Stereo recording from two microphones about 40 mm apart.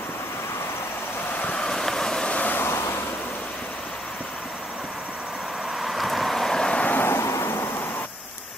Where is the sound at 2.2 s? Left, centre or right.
Left.